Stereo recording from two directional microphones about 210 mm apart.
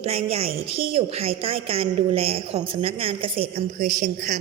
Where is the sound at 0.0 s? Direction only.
30° right (ahead or behind).